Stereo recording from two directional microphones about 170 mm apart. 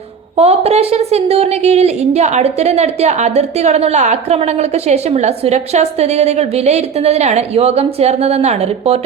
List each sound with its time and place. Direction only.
0.3 s a woman's voice: 40° right (ahead or behind)